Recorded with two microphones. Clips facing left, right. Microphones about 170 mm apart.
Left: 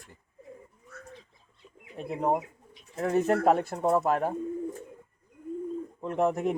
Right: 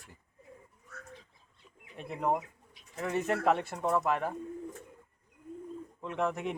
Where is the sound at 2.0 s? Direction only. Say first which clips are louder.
Left 4 dB; 35° left (ahead or behind).